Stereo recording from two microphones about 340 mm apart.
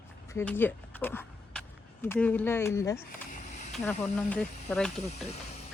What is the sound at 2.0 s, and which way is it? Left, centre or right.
Speech, centre.